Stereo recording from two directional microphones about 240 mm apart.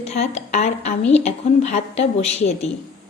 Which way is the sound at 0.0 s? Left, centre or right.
Left.